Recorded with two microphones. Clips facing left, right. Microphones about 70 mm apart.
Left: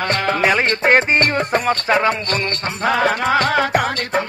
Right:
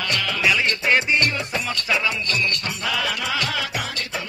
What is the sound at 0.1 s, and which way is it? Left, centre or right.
Music, left.